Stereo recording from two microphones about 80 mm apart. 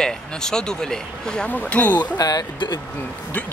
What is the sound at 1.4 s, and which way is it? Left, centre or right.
Speech, left.